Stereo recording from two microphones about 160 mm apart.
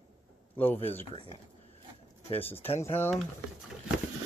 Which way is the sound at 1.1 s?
35° left (ahead or behind).